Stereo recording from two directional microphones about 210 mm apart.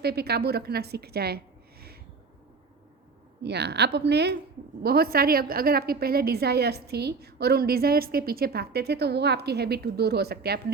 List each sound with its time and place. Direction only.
0.0 s a woman's voice: 50° right (ahead or behind)
3.4 s a woman's voice: 50° right (ahead or behind)